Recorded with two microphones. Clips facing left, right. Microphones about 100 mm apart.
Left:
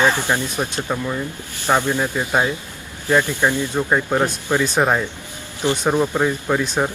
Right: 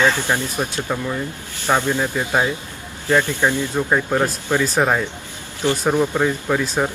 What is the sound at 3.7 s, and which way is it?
Speech, 5° left (ahead or behind).